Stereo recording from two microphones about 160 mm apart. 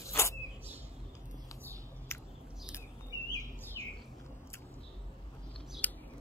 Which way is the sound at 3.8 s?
25° left (ahead or behind).